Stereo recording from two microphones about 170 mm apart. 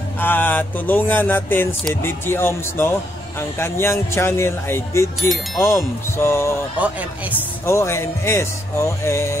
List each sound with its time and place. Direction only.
0.2 s a man's voice: 10° left (ahead or behind)
6.8 s speech: 10° right (ahead or behind)
7.6 s a man's voice: 15° left (ahead or behind)